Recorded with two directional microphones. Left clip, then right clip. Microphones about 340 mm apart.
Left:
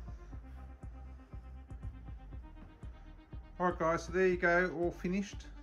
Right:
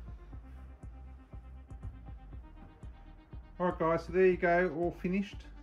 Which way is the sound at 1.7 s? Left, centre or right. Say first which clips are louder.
Right 2 dB; centre.